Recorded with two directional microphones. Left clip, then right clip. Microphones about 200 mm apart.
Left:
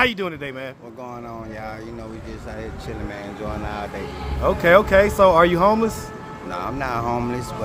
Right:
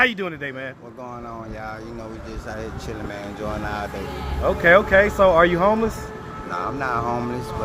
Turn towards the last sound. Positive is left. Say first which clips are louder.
# even
turn(degrees=10)  # may be behind; listen again after turning